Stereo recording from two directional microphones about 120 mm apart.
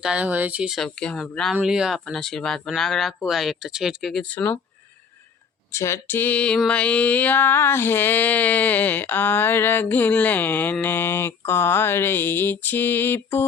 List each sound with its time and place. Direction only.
0.0 s speech: 10° right (ahead or behind)
0.8 s speech: 5° left (ahead or behind)
5.7 s a sound: 25° left (ahead or behind)